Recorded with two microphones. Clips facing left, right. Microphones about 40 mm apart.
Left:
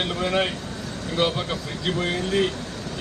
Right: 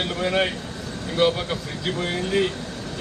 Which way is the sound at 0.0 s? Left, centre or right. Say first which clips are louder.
Right 1 dB; centre.